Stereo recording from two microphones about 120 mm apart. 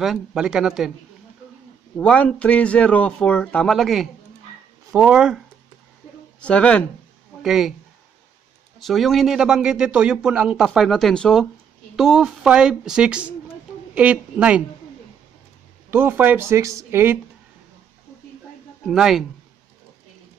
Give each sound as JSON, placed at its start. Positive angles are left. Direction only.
{"t": 0.0, "sound": "speech", "side_deg": -5}
{"t": 2.0, "sound": "speech", "side_deg": 10}
{"t": 6.4, "sound": "speech", "side_deg": 10}
{"t": 7.4, "sound": "speech", "side_deg": -5}
{"t": 8.7, "sound": "speech", "side_deg": 0}
{"t": 15.9, "sound": "speech", "side_deg": -15}
{"t": 18.9, "sound": "speech", "side_deg": -5}